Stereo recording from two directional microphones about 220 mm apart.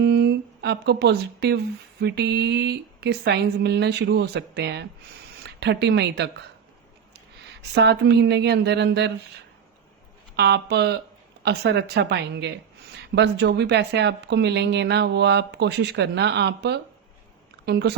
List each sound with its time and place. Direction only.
0.0 s speech: 50° right (ahead or behind)
7.6 s speech: 50° right (ahead or behind)
10.3 s speech: 50° right (ahead or behind)